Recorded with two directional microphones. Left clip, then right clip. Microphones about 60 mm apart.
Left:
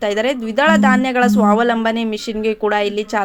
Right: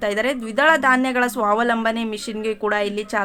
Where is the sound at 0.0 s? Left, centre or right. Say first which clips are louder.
Left 4 dB; left.